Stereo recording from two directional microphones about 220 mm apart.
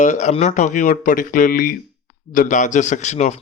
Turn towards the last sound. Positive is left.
turn(degrees=30)  # may be behind; listen again after turning